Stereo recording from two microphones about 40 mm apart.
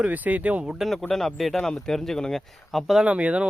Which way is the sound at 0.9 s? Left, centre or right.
Centre.